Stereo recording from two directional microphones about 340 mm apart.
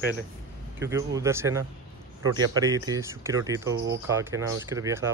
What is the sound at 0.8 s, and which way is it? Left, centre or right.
Speech, centre.